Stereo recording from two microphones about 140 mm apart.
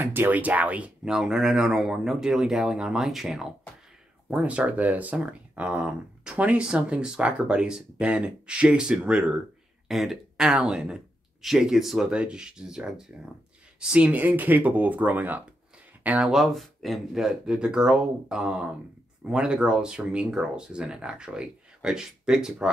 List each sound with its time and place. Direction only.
0.0 s speech: 15° right (ahead or behind)